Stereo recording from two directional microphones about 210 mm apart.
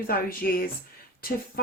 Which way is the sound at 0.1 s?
45° left (ahead or behind).